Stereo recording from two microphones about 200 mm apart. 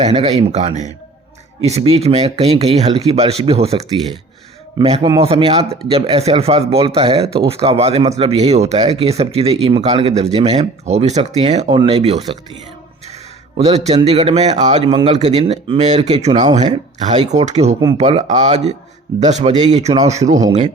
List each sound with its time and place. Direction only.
0.0 s speech: 30° right (ahead or behind)
4.8 s a man's voice: 20° right (ahead or behind)
13.7 s a man's voice: 35° right (ahead or behind)